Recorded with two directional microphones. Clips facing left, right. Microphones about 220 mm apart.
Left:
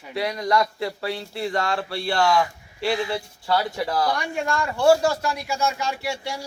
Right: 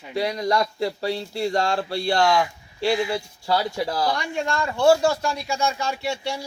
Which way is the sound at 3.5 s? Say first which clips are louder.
Even; 30° right (ahead or behind).